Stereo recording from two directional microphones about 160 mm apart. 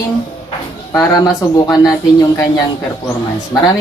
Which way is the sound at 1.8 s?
20° left (ahead or behind).